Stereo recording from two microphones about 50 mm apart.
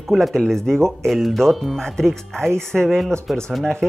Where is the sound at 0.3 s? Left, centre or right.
Centre.